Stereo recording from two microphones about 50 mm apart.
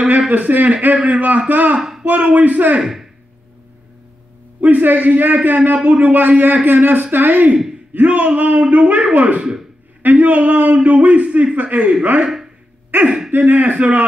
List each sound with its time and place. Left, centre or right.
0.3 s speech: right
1.8 s a sound: centre
2.0 s speech: right
2.8 s speech: centre
4.6 s speech: right
9.4 s speech: centre
10.0 s speech: right
13.3 s speech: right